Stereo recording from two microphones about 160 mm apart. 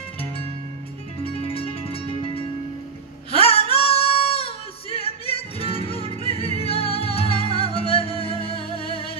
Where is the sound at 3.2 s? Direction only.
35° left (ahead or behind).